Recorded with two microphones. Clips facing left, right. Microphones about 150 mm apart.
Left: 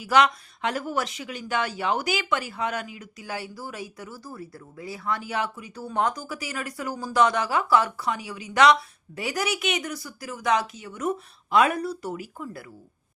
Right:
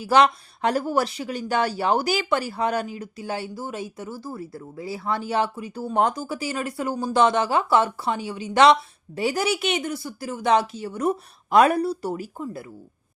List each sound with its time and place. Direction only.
0.0 s speech: 30° right (ahead or behind)